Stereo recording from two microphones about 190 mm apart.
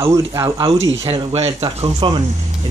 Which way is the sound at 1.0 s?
30° right (ahead or behind).